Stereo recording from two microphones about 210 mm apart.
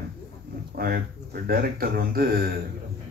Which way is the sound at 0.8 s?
45° right (ahead or behind).